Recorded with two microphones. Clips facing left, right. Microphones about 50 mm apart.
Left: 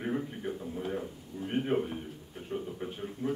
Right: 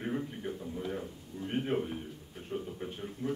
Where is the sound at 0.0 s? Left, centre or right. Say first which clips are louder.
Left 2 dB; centre.